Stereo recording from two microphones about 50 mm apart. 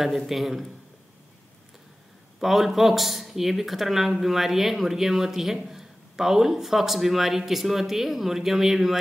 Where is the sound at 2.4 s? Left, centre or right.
Centre.